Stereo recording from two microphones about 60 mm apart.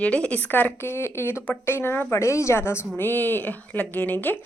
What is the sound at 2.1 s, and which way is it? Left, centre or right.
Speech, left.